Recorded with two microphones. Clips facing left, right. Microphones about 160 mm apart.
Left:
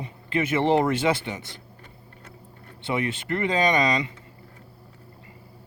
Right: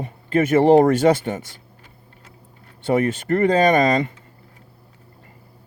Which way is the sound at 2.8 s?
45° right (ahead or behind).